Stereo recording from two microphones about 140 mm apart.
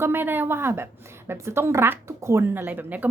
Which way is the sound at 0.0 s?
15° right (ahead or behind).